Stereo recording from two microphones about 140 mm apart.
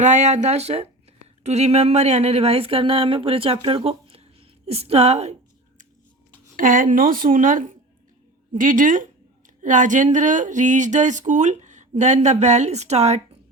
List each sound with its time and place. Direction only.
0.0 s speech: 55° right (ahead or behind)
6.6 s a woman's voice: 70° right (ahead or behind); by 13.2 s 50° right (ahead or behind)